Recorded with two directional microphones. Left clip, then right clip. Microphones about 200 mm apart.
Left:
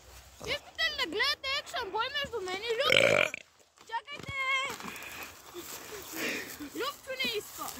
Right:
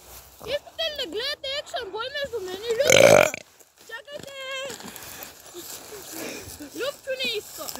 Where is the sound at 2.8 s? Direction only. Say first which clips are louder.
Right 10 dB; 25° right (ahead or behind).